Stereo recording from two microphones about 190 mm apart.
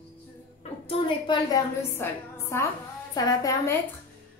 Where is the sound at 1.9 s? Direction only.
10° left (ahead or behind).